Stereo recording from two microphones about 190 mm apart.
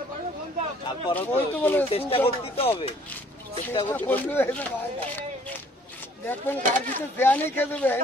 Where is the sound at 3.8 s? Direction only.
10° left (ahead or behind).